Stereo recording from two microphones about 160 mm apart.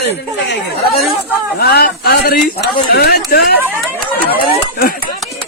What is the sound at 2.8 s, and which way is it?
Speech, 85° left.